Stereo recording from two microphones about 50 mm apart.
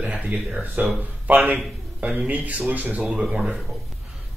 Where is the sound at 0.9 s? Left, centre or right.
Right.